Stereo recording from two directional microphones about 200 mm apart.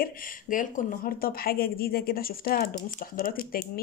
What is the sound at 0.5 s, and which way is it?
A woman's voice, 40° left (ahead or behind).